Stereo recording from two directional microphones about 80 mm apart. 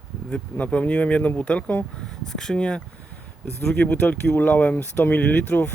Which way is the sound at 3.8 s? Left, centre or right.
Left.